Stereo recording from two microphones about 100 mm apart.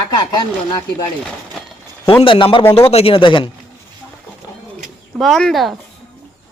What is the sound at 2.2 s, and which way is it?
Speech, 60° left (ahead or behind).